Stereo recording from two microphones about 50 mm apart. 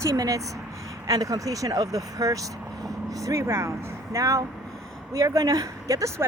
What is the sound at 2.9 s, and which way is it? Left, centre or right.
Speech, right.